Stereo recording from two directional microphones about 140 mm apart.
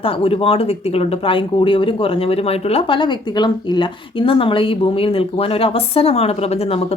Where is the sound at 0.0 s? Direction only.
40° left (ahead or behind).